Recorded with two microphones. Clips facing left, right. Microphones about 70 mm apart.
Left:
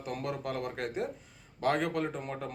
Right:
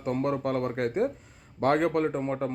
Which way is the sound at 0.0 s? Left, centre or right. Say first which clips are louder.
Right 8 dB; right.